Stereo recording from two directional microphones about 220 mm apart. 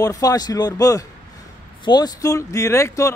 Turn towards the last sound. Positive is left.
turn(degrees=15)  # may be behind; listen again after turning